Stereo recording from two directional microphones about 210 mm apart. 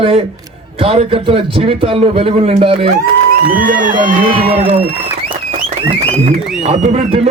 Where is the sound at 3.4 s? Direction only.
40° right (ahead or behind).